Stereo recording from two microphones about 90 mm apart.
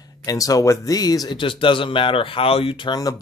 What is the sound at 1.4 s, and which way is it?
Speech, 70° left (ahead or behind).